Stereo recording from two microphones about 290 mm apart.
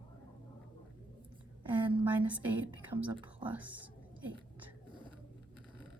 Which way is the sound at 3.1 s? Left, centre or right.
Centre.